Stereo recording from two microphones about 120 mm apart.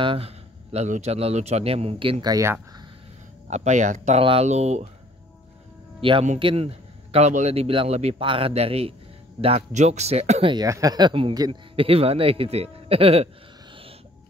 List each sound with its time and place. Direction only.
0.0 s a man's voice: 50° right (ahead or behind)
2.2 s speech: 30° right (ahead or behind)
3.4 s speech: 75° right (ahead or behind)
4.2 s speech: 50° right (ahead or behind)
4.5 s speech: 65° right (ahead or behind)
5.9 s a man's voice: 45° right (ahead or behind)
9.7 s a man's voice: 70° right (ahead or behind)
10.4 s a man's voice: 40° right (ahead or behind); by 13.3 s 55° right (ahead or behind)